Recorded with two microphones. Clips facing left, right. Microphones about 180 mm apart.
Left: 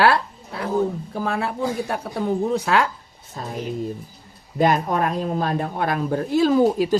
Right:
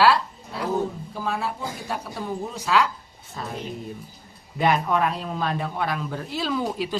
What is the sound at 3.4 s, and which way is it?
Speech, 40° left (ahead or behind).